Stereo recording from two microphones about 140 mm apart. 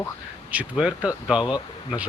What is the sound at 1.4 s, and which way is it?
Speech, 30° left (ahead or behind).